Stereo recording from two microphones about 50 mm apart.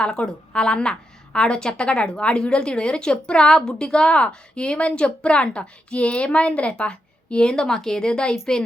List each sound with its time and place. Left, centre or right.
0.0 s a woman's voice: centre